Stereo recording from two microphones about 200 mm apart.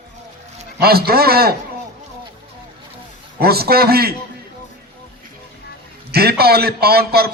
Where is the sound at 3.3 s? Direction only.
50° right (ahead or behind).